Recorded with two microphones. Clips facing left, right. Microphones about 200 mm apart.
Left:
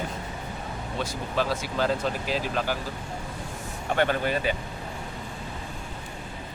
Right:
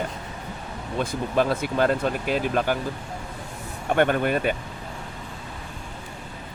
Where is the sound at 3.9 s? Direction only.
55° right (ahead or behind).